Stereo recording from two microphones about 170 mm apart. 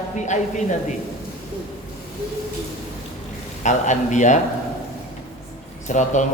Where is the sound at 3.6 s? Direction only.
45° left (ahead or behind).